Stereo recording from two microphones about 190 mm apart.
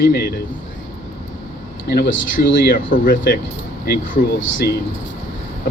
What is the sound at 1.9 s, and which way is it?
Speech, 55° left (ahead or behind).